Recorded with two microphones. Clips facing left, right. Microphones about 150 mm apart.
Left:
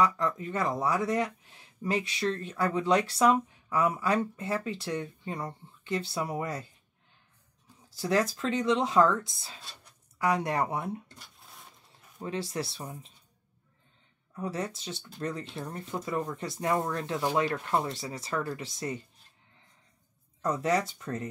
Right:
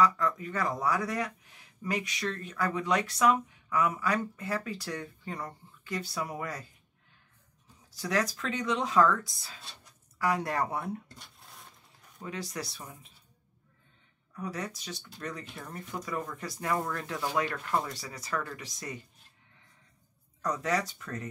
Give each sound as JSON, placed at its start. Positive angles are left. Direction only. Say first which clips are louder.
{"t": 0.0, "sound": "speech", "louder": "even", "side_deg": 25}
{"t": 7.9, "sound": "speech", "louder": "left 3 dB", "side_deg": 30}
{"t": 11.1, "sound": "a sound", "louder": "even", "side_deg": 0}
{"t": 12.2, "sound": "speech", "louder": "left 4 dB", "side_deg": 30}
{"t": 14.3, "sound": "speech", "louder": "left 3 dB", "side_deg": 25}
{"t": 20.4, "sound": "speech", "louder": "left 3 dB", "side_deg": 25}